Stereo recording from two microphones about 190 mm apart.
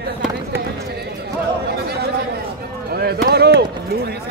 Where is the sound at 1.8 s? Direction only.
55° right (ahead or behind).